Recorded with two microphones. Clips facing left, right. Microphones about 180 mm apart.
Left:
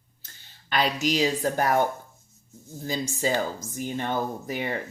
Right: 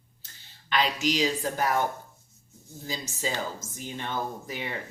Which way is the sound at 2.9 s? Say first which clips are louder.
Left 6 dB; 50° left (ahead or behind).